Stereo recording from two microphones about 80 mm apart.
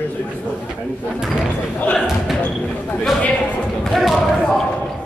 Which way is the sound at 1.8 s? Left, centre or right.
Centre.